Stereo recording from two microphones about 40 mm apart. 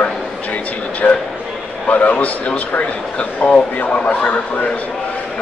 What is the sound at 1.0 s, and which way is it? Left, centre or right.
Speech, centre.